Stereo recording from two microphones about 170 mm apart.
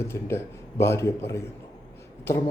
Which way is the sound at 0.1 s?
15° left (ahead or behind).